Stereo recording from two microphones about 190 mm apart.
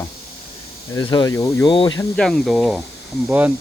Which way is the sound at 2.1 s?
5° left (ahead or behind).